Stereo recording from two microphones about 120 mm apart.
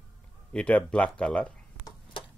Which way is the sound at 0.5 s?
10° left (ahead or behind).